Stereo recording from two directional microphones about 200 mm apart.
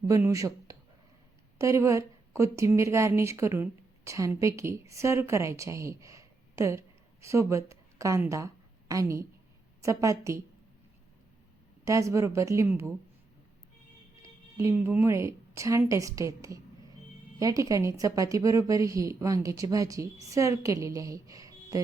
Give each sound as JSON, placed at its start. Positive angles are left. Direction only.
{"t": 0.1, "sound": "a woman's voice", "side_deg": -15}
{"t": 11.9, "sound": "a woman's voice", "side_deg": -15}
{"t": 14.2, "sound": "a woman's voice", "side_deg": -15}